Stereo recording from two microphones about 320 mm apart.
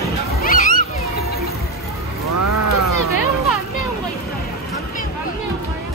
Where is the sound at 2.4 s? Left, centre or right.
Right.